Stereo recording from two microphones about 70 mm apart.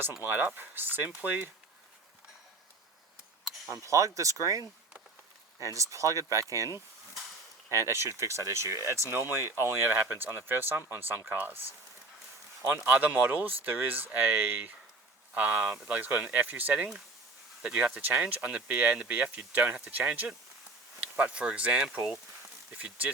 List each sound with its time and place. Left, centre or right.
0.2 s speech: right
3.7 s speech: right
5.6 s speech: right
7.7 s speech: right
12.6 s speech: right